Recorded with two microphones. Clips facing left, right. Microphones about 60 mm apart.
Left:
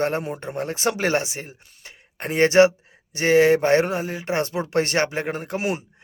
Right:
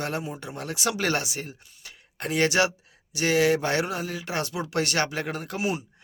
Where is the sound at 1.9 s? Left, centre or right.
Left.